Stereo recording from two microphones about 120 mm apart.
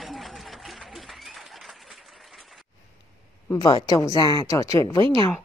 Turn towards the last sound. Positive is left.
turn(degrees=25)  # may be behind; listen again after turning